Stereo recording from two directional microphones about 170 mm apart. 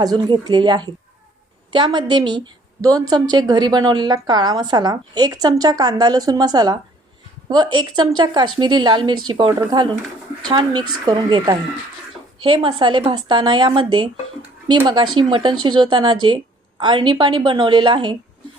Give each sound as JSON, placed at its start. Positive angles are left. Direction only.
{"t": 0.0, "sound": "a woman's voice", "side_deg": -25}